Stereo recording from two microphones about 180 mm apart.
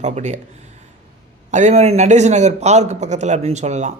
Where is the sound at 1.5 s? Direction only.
40° right (ahead or behind).